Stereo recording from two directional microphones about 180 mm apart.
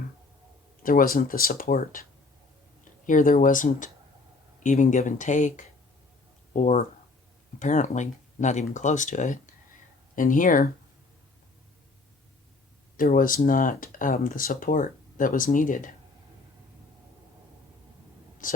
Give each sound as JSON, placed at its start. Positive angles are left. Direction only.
{"t": 0.8, "sound": "speech", "side_deg": 50}
{"t": 3.1, "sound": "speech", "side_deg": 45}
{"t": 13.0, "sound": "speech", "side_deg": 50}
{"t": 18.4, "sound": "a woman's voice", "side_deg": 45}